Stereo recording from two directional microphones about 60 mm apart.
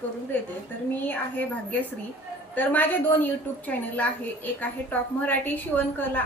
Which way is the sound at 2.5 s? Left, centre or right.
Left.